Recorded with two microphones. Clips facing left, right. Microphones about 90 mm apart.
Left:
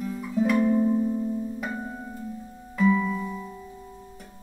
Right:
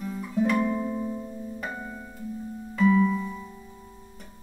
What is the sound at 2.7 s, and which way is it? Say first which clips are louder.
Music: right 1 dB; centre (ahead or behind).